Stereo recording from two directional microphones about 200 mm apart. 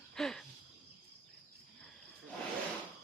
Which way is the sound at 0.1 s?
Centre (ahead or behind).